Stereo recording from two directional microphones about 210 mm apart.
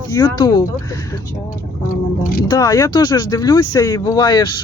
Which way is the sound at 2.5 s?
15° left (ahead or behind).